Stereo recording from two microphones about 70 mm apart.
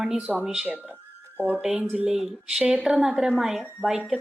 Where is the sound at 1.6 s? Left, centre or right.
Centre.